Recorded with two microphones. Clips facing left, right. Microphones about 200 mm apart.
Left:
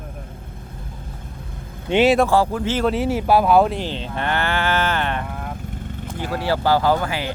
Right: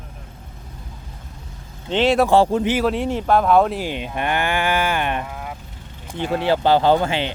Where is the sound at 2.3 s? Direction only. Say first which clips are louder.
Right 3 dB; 25° right (ahead or behind).